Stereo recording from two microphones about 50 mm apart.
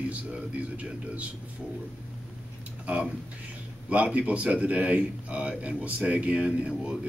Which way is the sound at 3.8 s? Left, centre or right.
Right.